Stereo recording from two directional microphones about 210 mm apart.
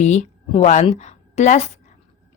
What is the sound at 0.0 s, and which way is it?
A woman's voice, 35° left (ahead or behind).